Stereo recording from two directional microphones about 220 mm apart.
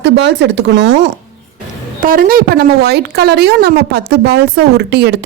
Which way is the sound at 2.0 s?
40° right (ahead or behind).